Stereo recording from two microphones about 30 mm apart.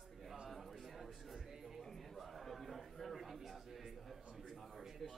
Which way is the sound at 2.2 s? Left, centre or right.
Centre.